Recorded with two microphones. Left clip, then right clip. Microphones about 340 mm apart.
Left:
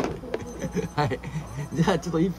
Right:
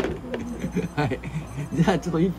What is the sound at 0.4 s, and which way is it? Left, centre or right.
Speech, centre.